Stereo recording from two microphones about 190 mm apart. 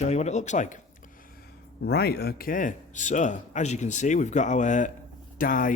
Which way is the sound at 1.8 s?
60° left (ahead or behind).